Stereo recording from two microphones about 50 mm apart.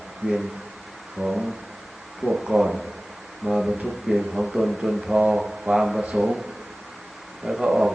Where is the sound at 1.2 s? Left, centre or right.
Centre.